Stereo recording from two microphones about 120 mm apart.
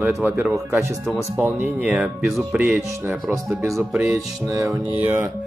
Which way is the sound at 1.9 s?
Centre (ahead or behind).